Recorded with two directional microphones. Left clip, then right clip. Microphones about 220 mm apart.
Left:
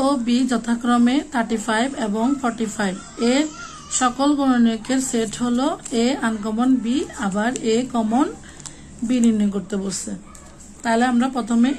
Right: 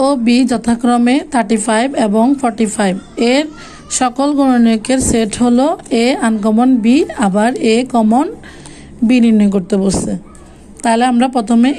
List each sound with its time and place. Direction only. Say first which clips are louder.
0.0 s a woman's voice: right 8 dB; 30° right (ahead or behind)